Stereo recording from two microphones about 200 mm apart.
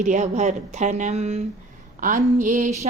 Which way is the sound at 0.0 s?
35° right (ahead or behind).